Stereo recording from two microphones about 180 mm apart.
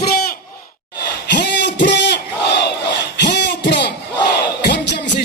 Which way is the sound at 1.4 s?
75° left (ahead or behind).